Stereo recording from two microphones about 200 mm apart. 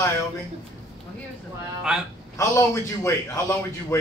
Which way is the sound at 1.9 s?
5° right (ahead or behind).